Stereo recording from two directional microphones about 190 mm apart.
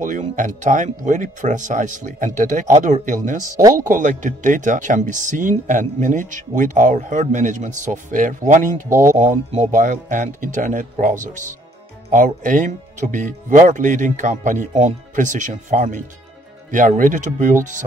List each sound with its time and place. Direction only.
0.0 s speech: 45° right (ahead or behind)
8.8 s speech: 15° right (ahead or behind)
9.1 s speech: 40° right (ahead or behind)